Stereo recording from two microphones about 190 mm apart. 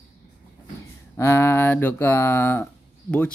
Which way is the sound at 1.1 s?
15° left (ahead or behind).